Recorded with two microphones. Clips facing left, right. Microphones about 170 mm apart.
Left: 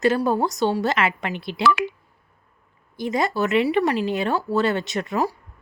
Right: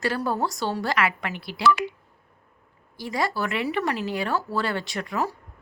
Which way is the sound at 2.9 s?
20° left (ahead or behind).